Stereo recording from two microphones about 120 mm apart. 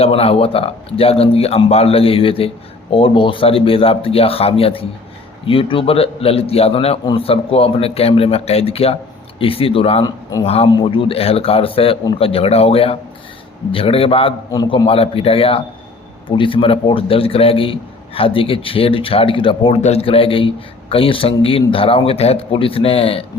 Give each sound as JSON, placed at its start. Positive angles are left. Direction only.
{"t": 0.0, "sound": "a man's voice", "side_deg": 55}
{"t": 14.5, "sound": "a man's voice", "side_deg": 35}
{"t": 14.8, "sound": "a man's voice", "side_deg": 50}
{"t": 19.8, "sound": "a man's voice", "side_deg": 55}